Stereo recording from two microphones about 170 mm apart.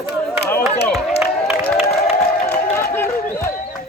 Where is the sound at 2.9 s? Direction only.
15° left (ahead or behind).